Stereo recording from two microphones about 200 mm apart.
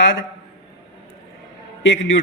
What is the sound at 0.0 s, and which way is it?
Speech, 65° left (ahead or behind).